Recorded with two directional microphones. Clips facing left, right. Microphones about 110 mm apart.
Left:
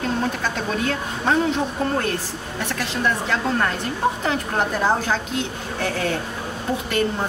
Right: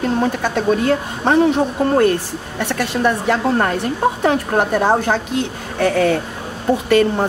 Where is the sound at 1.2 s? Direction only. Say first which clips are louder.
Right 6 dB; 55° right (ahead or behind).